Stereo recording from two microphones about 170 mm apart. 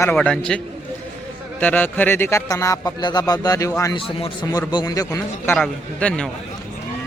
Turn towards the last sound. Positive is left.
turn(degrees=5)  # may be behind; listen again after turning